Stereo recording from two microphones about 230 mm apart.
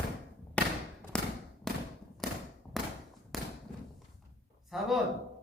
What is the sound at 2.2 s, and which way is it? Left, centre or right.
Thump, centre.